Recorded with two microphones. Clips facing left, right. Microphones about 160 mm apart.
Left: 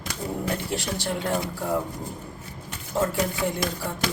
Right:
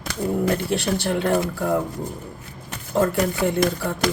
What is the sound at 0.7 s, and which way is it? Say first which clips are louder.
Speech: right 6 dB; 65° right (ahead or behind).